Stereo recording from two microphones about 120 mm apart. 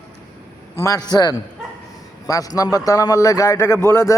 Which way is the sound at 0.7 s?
25° left (ahead or behind).